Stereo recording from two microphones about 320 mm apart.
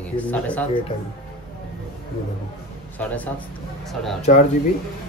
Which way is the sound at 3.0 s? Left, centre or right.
Centre.